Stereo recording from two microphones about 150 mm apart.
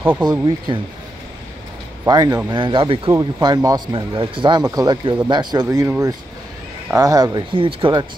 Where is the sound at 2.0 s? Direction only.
25° right (ahead or behind).